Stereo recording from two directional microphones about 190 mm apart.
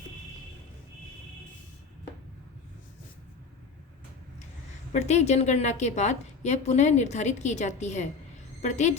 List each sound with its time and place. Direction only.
4.9 s a woman's voice: 35° left (ahead or behind)